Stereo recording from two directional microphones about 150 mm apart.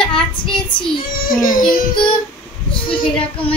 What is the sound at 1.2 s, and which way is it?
Speech, 70° left (ahead or behind).